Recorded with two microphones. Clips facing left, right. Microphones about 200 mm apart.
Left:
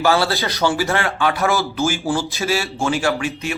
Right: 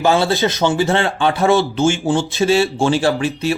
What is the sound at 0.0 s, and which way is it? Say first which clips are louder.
Speech: right 3 dB; 20° right (ahead or behind).